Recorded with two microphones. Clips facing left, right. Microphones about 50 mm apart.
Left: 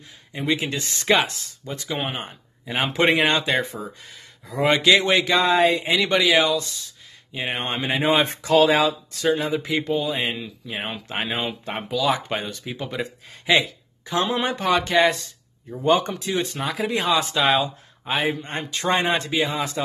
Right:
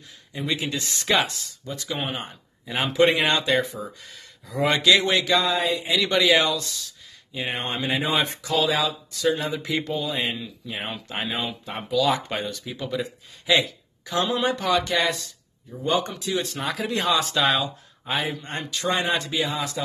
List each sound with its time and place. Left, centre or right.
0.3 s a man's voice: left
2.9 s speech: left
5.4 s speech: left
6.1 s speech: centre
7.3 s speech: left
9.7 s speech: left
11.4 s speech: left
12.1 s speech: left
16.7 s speech: centre
18.2 s speech: left